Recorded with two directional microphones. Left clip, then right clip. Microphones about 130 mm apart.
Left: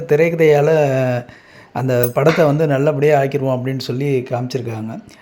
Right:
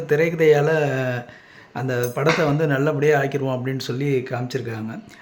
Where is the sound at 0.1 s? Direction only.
30° left (ahead or behind).